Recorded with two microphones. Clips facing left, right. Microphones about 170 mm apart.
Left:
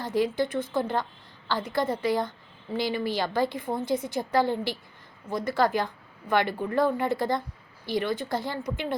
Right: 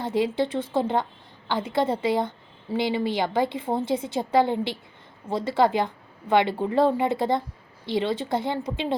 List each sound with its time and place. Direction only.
0.0 s a woman's voice: 25° right (ahead or behind)